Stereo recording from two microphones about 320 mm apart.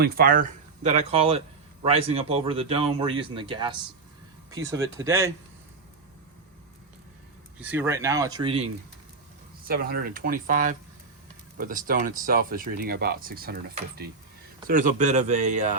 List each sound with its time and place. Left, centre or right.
0.0 s speech: right; by 5.3 s centre
7.6 s speech: centre
9.6 s speech: right